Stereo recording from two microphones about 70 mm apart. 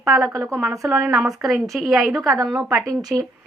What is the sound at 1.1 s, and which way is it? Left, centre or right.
A woman's voice, centre.